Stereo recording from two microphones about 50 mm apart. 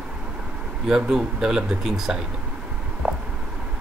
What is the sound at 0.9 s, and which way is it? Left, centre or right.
Speech, centre.